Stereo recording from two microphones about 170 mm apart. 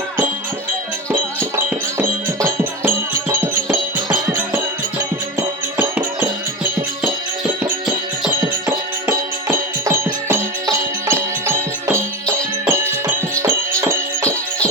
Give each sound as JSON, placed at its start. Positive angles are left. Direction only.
{"t": 1.1, "sound": "music", "side_deg": -15}
{"t": 8.7, "sound": "music", "side_deg": -15}